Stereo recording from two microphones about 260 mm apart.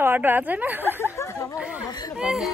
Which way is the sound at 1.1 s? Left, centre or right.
Centre.